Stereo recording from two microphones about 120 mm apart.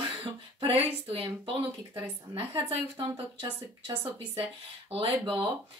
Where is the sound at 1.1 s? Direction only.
50° right (ahead or behind).